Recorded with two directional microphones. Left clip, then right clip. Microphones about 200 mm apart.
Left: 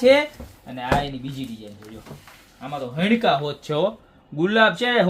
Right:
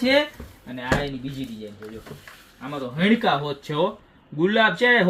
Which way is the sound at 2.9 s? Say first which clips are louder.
Left 1 dB; 15° left (ahead or behind).